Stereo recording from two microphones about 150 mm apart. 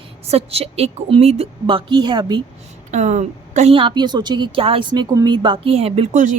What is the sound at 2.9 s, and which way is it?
Speech, 50° right (ahead or behind).